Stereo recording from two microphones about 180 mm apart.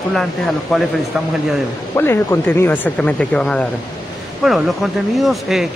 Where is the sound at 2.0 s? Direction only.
15° left (ahead or behind).